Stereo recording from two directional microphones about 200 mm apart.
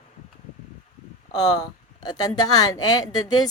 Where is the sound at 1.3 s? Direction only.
20° left (ahead or behind).